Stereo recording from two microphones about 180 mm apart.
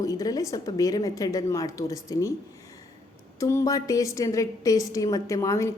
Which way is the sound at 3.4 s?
15° left (ahead or behind).